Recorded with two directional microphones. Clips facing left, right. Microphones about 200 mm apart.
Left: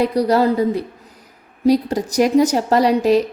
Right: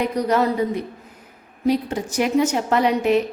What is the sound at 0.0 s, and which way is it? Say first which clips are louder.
A woman's voice: left 4 dB; 35° left (ahead or behind).